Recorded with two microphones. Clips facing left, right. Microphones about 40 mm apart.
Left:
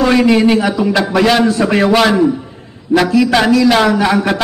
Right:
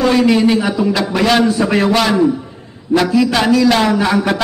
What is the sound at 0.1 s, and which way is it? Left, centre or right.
A man's voice, centre.